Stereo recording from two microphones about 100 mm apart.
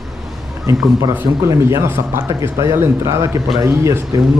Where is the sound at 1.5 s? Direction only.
30° right (ahead or behind).